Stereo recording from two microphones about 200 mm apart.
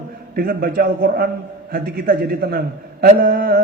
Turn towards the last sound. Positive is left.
turn(degrees=-50)  # may be behind; listen again after turning